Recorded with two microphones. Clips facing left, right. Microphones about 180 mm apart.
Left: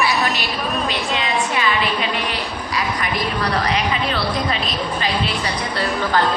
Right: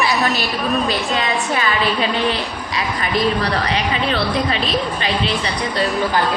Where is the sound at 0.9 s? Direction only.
35° right (ahead or behind).